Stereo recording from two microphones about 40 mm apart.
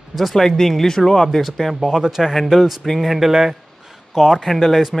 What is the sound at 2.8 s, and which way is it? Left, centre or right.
Speech, centre.